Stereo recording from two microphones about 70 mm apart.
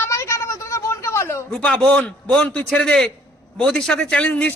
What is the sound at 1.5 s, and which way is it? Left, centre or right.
A man's voice, centre.